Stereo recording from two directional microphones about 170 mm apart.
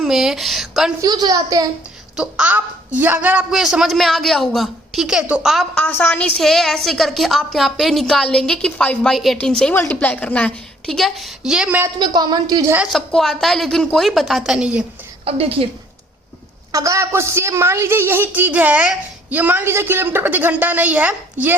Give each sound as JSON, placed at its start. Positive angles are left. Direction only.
{"t": 0.0, "sound": "speech", "side_deg": 0}
{"t": 1.0, "sound": "a woman's voice", "side_deg": -25}
{"t": 2.1, "sound": "a woman's voice", "side_deg": -5}
{"t": 5.7, "sound": "a woman's voice", "side_deg": 10}
{"t": 11.9, "sound": "a woman's voice", "side_deg": -25}
{"t": 12.7, "sound": "a woman's voice", "side_deg": -5}
{"t": 15.2, "sound": "speech", "side_deg": -35}
{"t": 16.7, "sound": "a woman's voice", "side_deg": -20}